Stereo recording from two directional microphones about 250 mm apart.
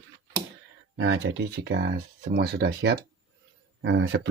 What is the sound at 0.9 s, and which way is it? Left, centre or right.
Speech, right.